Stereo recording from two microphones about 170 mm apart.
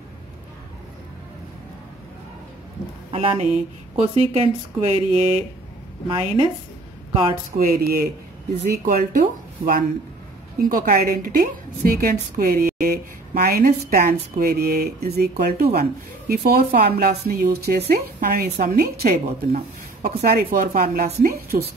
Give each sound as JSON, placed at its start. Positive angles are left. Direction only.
{"t": 3.1, "sound": "speech", "side_deg": -35}
{"t": 7.5, "sound": "a woman's voice", "side_deg": -60}
{"t": 8.8, "sound": "a woman's voice", "side_deg": -55}